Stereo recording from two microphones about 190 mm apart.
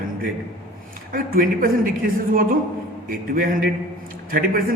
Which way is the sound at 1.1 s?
50° right (ahead or behind).